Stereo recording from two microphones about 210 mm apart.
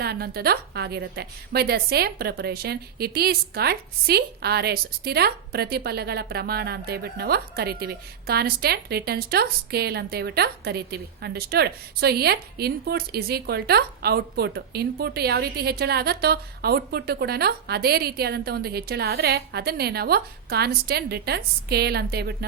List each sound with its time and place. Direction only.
0.0 s a woman's voice: 50° right (ahead or behind)